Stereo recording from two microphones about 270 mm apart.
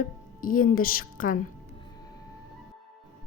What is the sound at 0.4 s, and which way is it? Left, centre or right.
Speech, left.